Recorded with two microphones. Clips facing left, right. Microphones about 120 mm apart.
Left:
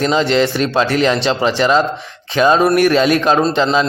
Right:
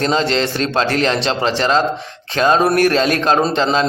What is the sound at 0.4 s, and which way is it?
Speech, 10° left (ahead or behind).